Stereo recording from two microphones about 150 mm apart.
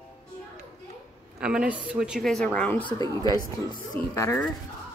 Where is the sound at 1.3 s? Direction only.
5° right (ahead or behind); by 2.9 s 10° left (ahead or behind).